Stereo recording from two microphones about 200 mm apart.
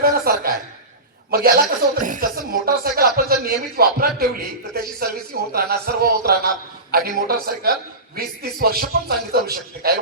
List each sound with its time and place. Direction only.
0.0 s a woman's voice: 50° right (ahead or behind)